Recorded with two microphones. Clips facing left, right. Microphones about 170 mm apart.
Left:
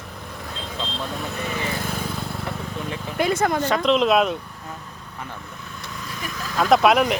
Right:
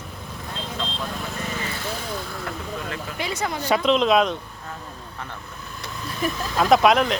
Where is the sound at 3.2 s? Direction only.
50° left (ahead or behind).